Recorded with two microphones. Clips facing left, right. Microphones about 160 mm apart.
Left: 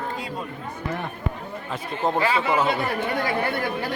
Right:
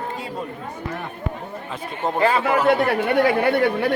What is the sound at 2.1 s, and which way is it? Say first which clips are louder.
Speech: right 6 dB; 45° right (ahead or behind).